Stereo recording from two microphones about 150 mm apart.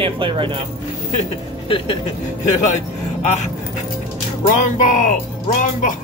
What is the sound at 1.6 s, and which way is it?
Speech, 35° left (ahead or behind).